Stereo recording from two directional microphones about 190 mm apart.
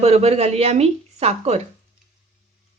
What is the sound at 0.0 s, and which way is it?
Speech, 35° right (ahead or behind).